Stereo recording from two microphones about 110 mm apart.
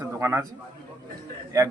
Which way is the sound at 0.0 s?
25° right (ahead or behind).